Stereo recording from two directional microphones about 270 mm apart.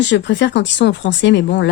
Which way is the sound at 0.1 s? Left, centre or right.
Left.